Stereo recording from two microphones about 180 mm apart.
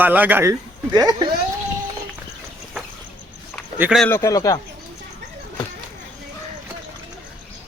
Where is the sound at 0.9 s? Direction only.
20° right (ahead or behind).